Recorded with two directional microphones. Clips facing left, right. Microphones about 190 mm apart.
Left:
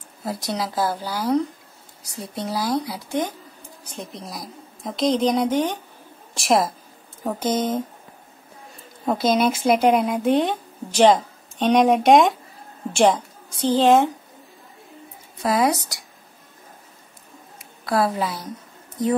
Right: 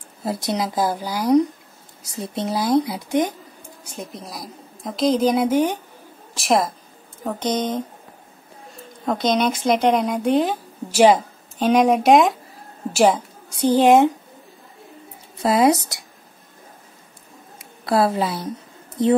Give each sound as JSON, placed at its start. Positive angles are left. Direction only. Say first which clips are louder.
{"t": 0.2, "sound": "a woman's voice", "louder": "right 3 dB", "side_deg": -20}
{"t": 3.9, "sound": "speech", "louder": "right 1 dB", "side_deg": 0}
{"t": 9.0, "sound": "a woman's voice", "louder": "even", "side_deg": 5}
{"t": 15.4, "sound": "a woman's voice", "louder": "right 4 dB", "side_deg": -25}
{"t": 17.6, "sound": "a woman's voice", "louder": "right 3 dB", "side_deg": -30}